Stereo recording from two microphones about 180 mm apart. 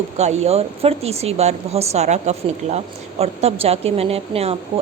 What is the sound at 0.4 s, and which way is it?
A woman's voice, 35° right (ahead or behind).